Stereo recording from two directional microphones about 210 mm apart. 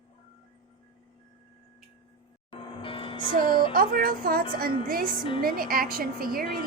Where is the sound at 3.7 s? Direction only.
45° right (ahead or behind).